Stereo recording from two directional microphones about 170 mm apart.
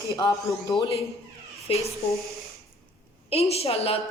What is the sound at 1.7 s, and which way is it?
Speech, 35° left (ahead or behind).